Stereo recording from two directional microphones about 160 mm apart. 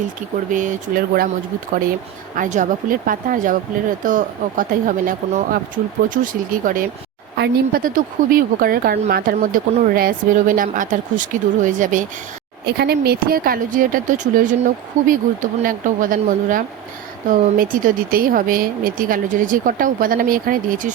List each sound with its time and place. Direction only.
0.5 s speech: 55° right (ahead or behind)
2.3 s speech: 55° right (ahead or behind)
7.3 s speech: 80° right
9.9 s speech: 60° right (ahead or behind)
12.6 s speech: 85° right; by 20.9 s 55° right (ahead or behind)